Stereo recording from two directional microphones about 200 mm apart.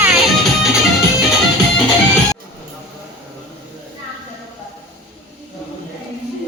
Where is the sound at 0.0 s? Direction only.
Centre (ahead or behind).